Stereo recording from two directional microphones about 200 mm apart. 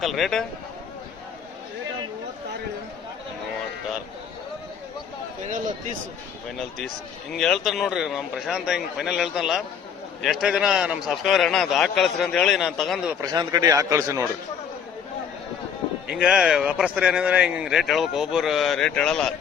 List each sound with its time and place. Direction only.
0.0 s speech: centre (ahead or behind)
7.3 s speech: centre (ahead or behind)
13.2 s a man's voice: 20° right (ahead or behind)
16.0 s speech: 5° right (ahead or behind)